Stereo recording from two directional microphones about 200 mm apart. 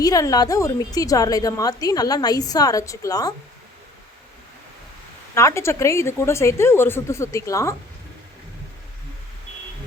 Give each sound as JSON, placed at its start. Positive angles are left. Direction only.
{"t": 0.0, "sound": "a woman's voice", "side_deg": 20}
{"t": 5.3, "sound": "a woman's voice", "side_deg": 15}